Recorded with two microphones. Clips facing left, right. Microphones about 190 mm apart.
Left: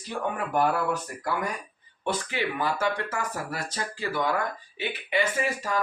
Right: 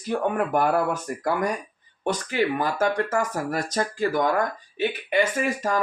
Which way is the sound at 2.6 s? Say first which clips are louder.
Right 4 dB; 45° right (ahead or behind).